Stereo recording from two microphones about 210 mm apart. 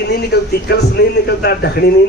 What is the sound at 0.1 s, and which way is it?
A man's voice, 50° left (ahead or behind).